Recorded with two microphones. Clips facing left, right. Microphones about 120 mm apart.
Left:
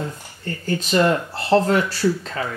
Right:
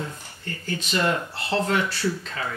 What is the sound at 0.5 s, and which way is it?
Speech, 40° left (ahead or behind).